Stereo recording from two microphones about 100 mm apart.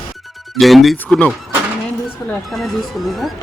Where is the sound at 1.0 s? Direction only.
15° left (ahead or behind).